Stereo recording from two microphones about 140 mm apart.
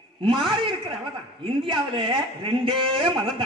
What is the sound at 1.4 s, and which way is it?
A man's voice, 35° right (ahead or behind).